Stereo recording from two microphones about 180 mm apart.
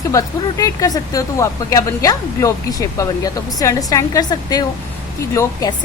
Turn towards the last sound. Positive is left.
turn(degrees=15)  # may be behind; listen again after turning